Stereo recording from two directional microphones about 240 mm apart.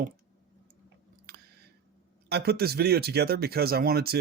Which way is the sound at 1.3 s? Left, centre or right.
Right.